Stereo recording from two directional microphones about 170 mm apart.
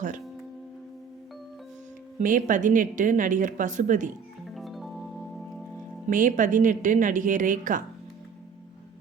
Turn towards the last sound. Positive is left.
turn(degrees=-50)  # may be behind; listen again after turning